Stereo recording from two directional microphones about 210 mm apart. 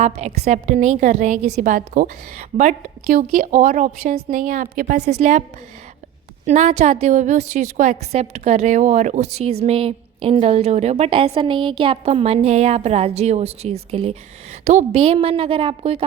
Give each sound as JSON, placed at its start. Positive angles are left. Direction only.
{"t": 0.0, "sound": "a woman's voice", "side_deg": -30}
{"t": 5.1, "sound": "a woman's voice", "side_deg": -30}
{"t": 6.4, "sound": "a woman's voice", "side_deg": -30}